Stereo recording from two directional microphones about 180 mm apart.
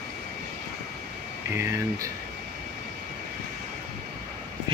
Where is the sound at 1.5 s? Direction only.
15° right (ahead or behind).